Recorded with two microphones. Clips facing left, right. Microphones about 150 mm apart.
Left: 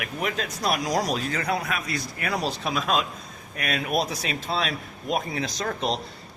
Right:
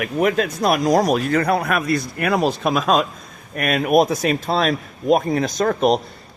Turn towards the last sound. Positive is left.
turn(degrees=-55)  # may be behind; listen again after turning